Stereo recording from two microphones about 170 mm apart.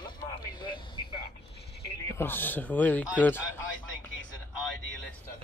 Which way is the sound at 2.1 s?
10° left (ahead or behind).